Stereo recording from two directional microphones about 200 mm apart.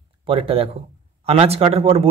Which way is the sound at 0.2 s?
25° right (ahead or behind).